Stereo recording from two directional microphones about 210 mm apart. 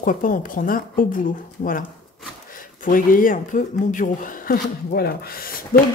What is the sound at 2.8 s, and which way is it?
Speech, 40° left (ahead or behind).